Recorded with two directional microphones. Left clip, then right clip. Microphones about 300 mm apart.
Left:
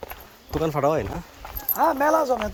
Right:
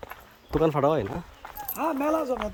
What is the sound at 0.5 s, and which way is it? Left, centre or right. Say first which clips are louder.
Speech: even; centre.